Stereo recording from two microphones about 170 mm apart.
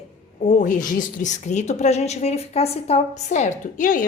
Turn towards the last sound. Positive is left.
turn(degrees=50)  # may be behind; listen again after turning